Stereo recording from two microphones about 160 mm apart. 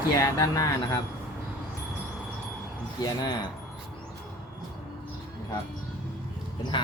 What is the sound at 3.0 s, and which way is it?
Speech, 25° left (ahead or behind).